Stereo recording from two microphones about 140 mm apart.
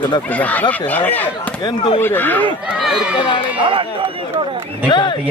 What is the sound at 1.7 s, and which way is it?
Speech, 40° left (ahead or behind).